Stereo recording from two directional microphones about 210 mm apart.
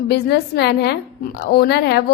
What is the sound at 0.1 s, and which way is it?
A woman's voice, 50° left (ahead or behind).